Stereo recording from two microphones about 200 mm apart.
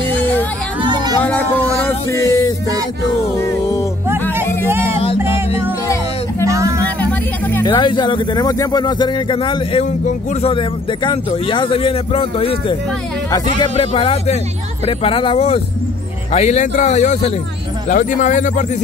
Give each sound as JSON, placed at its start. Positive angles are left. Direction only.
{"t": 0.8, "sound": "a sound", "side_deg": -20}
{"t": 1.2, "sound": "music", "side_deg": 10}
{"t": 4.6, "sound": "music", "side_deg": -10}
{"t": 6.4, "sound": "music", "side_deg": -15}
{"t": 7.0, "sound": "music", "side_deg": 10}
{"t": 7.6, "sound": "a man's voice", "side_deg": 25}